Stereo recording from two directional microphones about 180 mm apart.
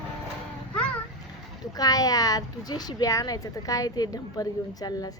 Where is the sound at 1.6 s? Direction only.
20° left (ahead or behind).